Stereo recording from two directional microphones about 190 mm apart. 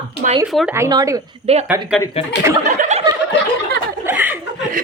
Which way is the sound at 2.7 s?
40° right (ahead or behind).